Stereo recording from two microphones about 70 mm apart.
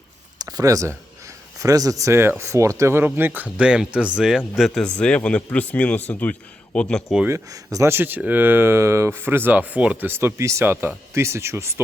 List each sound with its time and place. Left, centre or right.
0.3 s a sound: right
1.5 s speech: right
3.0 s speech: right; by 4.7 s centre
4.7 s speech: centre
6.7 s speech: centre
7.5 s speech: right
7.9 s speech: right
10.1 s speech: right
10.6 s speech: right
11.1 s speech: right